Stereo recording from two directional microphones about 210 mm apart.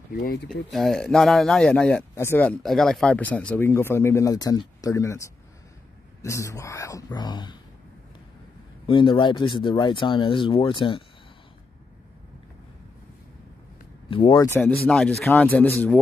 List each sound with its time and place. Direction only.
0.1 s speech: 50° left (ahead or behind)
0.5 s speech: centre (ahead or behind); by 7.5 s 20° left (ahead or behind)
8.8 s speech: 25° left (ahead or behind)
14.1 s speech: 20° left (ahead or behind)
14.9 s speech: 5° left (ahead or behind)